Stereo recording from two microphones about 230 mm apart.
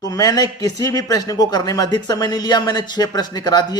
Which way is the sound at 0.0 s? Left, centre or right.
Centre.